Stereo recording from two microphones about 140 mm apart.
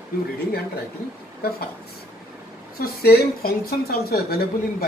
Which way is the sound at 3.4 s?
90° left.